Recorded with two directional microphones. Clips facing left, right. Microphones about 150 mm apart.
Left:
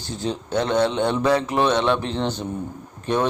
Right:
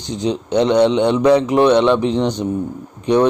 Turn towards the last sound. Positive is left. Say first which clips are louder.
# right 8 dB
turn(degrees=-15)  # may be behind; listen again after turning